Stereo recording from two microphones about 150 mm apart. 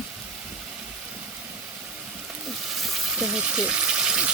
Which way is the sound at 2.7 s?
Centre (ahead or behind).